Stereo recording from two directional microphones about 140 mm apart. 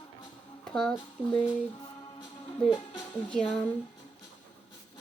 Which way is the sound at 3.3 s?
5° left (ahead or behind).